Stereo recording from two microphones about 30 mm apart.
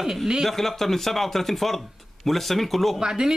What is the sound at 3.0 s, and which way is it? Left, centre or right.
Speech, right.